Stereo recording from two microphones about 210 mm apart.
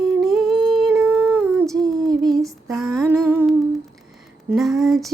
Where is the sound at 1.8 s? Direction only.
20° right (ahead or behind).